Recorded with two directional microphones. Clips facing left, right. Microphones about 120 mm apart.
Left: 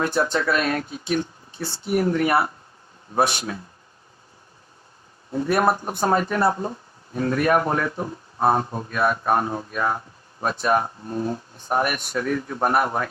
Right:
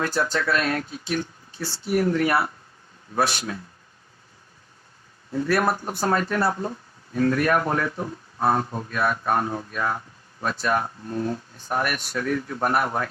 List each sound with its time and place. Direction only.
0.0 s speech: 25° left (ahead or behind)
5.3 s speech: 25° left (ahead or behind)